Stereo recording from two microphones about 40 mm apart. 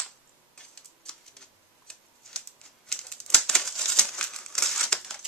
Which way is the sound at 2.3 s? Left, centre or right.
Centre.